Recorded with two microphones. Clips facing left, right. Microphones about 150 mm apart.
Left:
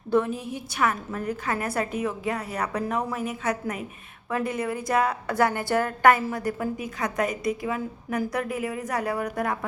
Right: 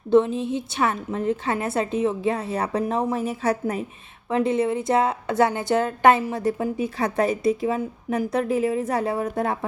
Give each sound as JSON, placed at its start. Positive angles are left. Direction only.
{"t": 0.1, "sound": "a woman's voice", "side_deg": -25}